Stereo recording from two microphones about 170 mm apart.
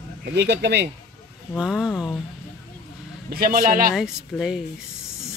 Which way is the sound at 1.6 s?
5° right (ahead or behind).